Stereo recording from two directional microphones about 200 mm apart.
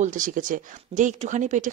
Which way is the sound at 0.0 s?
40° right (ahead or behind).